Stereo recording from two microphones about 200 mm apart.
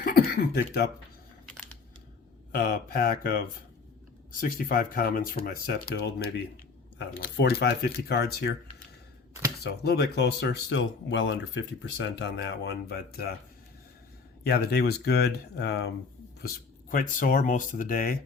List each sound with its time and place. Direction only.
0.0 s throat clearing: 50° left (ahead or behind)
2.5 s speech: 50° left (ahead or behind)
9.6 s speech: 55° left (ahead or behind)
14.4 s speech: 50° left (ahead or behind)
16.9 s speech: 45° left (ahead or behind)